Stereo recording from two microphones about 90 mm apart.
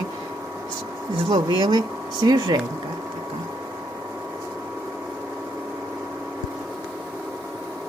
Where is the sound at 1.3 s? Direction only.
50° right (ahead or behind).